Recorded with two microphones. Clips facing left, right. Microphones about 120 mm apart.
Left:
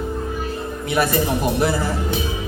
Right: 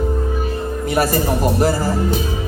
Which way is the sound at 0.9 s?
40° right (ahead or behind).